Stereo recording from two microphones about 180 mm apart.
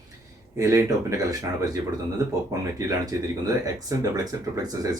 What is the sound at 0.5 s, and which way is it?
Speech, 15° right (ahead or behind).